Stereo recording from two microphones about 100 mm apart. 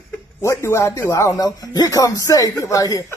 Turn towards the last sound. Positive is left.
turn(degrees=35)  # may be behind; listen again after turning